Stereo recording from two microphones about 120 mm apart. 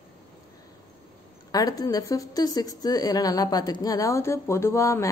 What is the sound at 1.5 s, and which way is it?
A woman's voice, 30° left (ahead or behind).